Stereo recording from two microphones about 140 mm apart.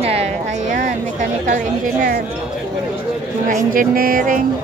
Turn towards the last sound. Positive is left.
turn(degrees=-80)